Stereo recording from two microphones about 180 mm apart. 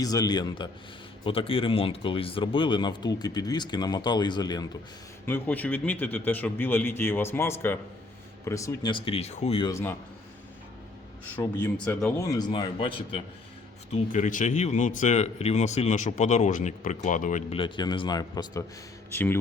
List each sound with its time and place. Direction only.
0.0 s speech: 20° left (ahead or behind)
5.2 s a man's voice: 10° left (ahead or behind); by 9.6 s 35° left (ahead or behind)
9.6 s a man's voice: 15° left (ahead or behind)
11.3 s a man's voice: 10° left (ahead or behind)
12.4 s speech: 25° left (ahead or behind)
13.9 s speech: 45° left (ahead or behind)
17.5 s speech: 25° left (ahead or behind)
19.1 s a man's voice: 10° left (ahead or behind)